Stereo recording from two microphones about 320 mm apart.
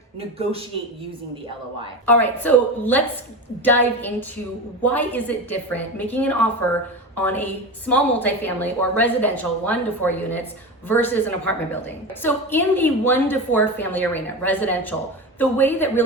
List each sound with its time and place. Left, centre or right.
0.2 s a man's voice: centre
2.0 s a woman's voice: centre